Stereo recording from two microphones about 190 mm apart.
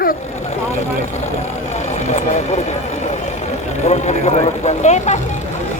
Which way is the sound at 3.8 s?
35° left (ahead or behind).